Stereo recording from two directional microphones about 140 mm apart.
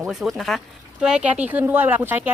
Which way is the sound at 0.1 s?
Centre (ahead or behind).